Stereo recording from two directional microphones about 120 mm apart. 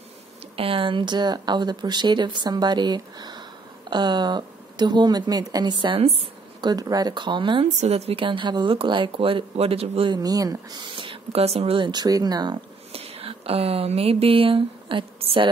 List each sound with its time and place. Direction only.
0.6 s speech: 50° right (ahead or behind)
6.6 s speech: 35° right (ahead or behind)
7.6 s speech: 65° right (ahead or behind)
10.1 s speech: 30° right (ahead or behind)
12.9 s speech: 55° right (ahead or behind)